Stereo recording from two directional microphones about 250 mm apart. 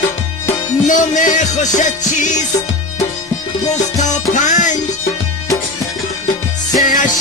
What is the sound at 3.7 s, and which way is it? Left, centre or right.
Music, left.